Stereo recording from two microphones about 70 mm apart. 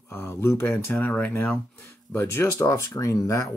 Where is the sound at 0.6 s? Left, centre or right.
Left.